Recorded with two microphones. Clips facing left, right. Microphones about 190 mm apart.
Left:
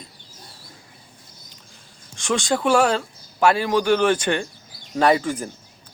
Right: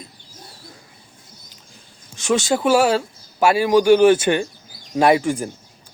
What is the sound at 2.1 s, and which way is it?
Speech, 5° right (ahead or behind).